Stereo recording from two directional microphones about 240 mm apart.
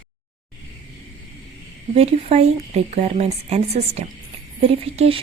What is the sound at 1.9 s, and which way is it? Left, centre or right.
A woman's voice, right.